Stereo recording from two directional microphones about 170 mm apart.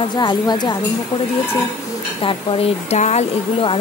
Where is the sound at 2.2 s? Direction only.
30° left (ahead or behind).